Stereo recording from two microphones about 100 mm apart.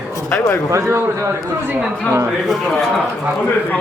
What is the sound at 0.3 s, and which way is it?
Speech, 20° left (ahead or behind).